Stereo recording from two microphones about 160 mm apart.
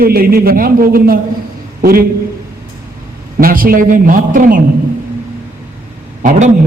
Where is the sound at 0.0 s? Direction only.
65° right (ahead or behind).